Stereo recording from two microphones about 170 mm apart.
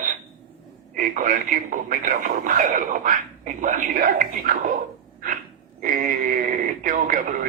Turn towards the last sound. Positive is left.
turn(degrees=-50)  # may be behind; listen again after turning